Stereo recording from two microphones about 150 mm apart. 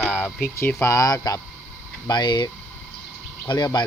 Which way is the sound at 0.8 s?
20° left (ahead or behind).